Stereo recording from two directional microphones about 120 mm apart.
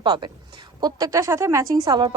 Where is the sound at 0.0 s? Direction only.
40° right (ahead or behind).